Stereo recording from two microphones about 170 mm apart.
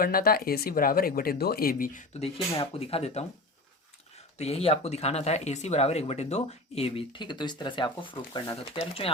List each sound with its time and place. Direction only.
0.0 s speech: 60° left (ahead or behind); by 3.2 s 35° left (ahead or behind)
4.4 s speech: 35° left (ahead or behind)